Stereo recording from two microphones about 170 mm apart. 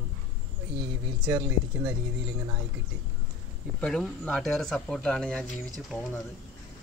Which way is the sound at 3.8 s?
5° left (ahead or behind).